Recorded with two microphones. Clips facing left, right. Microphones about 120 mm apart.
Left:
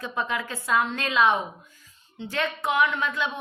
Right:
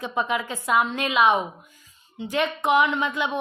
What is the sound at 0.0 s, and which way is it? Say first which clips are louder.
A woman's voice: right 3 dB; 15° right (ahead or behind).